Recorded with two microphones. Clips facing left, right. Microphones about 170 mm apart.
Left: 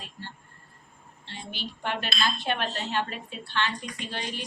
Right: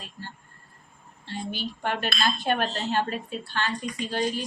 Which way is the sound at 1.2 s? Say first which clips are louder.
Right 6 dB; 45° right (ahead or behind).